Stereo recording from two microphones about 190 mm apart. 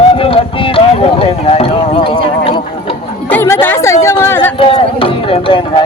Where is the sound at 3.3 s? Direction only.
10° left (ahead or behind).